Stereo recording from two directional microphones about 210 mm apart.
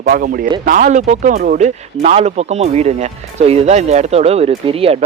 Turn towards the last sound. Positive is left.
turn(degrees=-25)  # may be behind; listen again after turning